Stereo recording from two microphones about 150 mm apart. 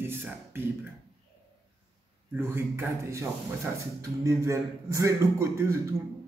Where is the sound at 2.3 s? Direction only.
15° right (ahead or behind).